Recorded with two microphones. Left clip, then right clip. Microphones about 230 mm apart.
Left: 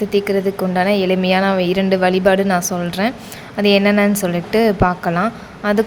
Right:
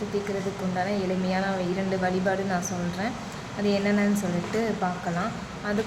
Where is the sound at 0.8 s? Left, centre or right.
Left.